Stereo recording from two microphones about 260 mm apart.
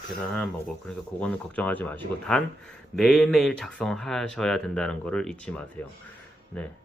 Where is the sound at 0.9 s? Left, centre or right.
Centre.